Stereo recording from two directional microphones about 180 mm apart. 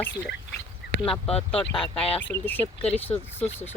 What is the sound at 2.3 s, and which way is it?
Speech, 10° left (ahead or behind).